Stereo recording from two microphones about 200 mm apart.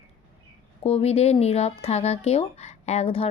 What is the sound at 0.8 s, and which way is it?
Speech, 30° left (ahead or behind).